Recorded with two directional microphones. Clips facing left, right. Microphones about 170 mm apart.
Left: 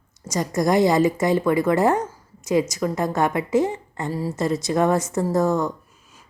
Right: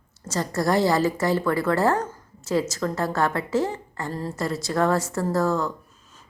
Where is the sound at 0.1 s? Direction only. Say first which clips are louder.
Left 2 dB; 15° left (ahead or behind).